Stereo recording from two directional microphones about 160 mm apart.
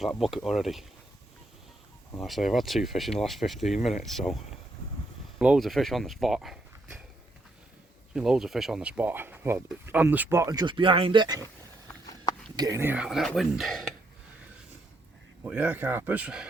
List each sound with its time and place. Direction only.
0.0 s speech: centre (ahead or behind)
2.2 s speech: centre (ahead or behind)
5.4 s speech: 5° right (ahead or behind)
8.1 s speech: 5° right (ahead or behind); by 11.4 s 25° right (ahead or behind)
12.5 s speech: 20° right (ahead or behind); by 13.9 s centre (ahead or behind)
15.4 s speech: 10° right (ahead or behind)